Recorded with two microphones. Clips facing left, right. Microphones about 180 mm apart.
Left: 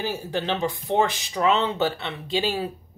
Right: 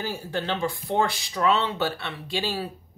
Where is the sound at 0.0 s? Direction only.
20° left (ahead or behind).